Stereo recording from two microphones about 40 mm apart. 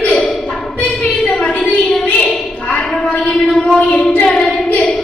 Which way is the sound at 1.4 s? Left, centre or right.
Left.